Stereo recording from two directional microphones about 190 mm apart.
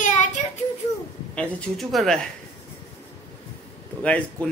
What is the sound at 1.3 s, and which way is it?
Speech, 5° left (ahead or behind).